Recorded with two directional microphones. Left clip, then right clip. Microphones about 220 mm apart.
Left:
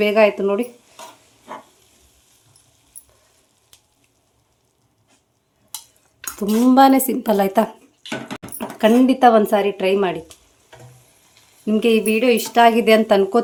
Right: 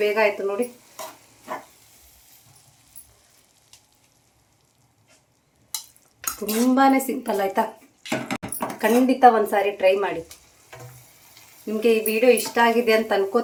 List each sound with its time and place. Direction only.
0.0 s speech: 50° left (ahead or behind)
6.4 s speech: 50° left (ahead or behind)
8.8 s speech: 50° left (ahead or behind)
11.6 s speech: 50° left (ahead or behind)